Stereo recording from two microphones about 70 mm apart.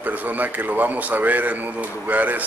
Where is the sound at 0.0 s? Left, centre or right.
Right.